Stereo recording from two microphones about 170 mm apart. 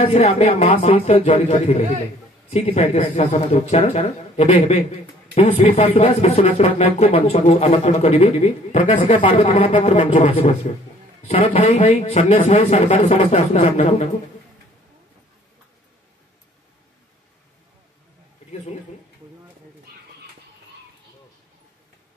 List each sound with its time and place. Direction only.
0.1 s speech: 40° left (ahead or behind)